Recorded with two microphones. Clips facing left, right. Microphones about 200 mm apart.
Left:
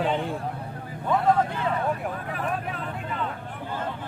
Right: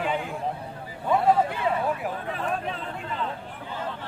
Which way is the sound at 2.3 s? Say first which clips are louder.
Right 1 dB; 25° right (ahead or behind).